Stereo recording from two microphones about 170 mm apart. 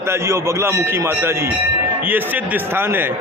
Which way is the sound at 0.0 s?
15° right (ahead or behind).